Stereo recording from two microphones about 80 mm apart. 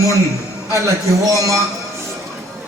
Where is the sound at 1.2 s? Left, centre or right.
Right.